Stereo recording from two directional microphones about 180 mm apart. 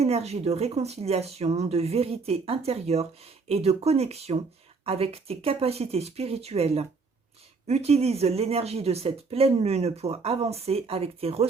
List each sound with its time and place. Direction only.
0.0 s speech: 35° right (ahead or behind)